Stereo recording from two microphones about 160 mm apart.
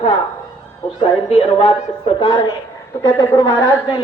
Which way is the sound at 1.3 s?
40° left (ahead or behind).